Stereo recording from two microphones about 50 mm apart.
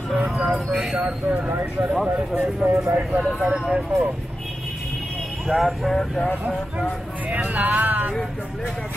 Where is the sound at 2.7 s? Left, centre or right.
Right.